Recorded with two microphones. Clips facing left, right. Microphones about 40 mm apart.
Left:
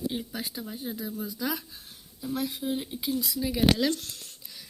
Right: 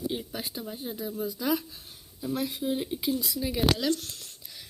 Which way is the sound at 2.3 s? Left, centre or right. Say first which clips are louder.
Even; right.